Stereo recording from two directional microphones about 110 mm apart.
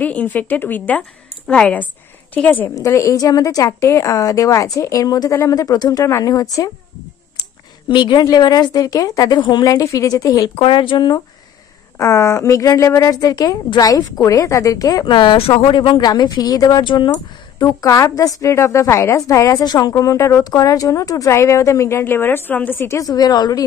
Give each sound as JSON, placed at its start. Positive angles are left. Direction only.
{"t": 0.0, "sound": "speech", "side_deg": 15}
{"t": 2.7, "sound": "a woman's voice", "side_deg": 25}
{"t": 7.9, "sound": "a woman's voice", "side_deg": 45}
{"t": 10.5, "sound": "speech", "side_deg": 50}
{"t": 12.0, "sound": "a woman's voice", "side_deg": 25}
{"t": 15.1, "sound": "a woman's voice", "side_deg": 55}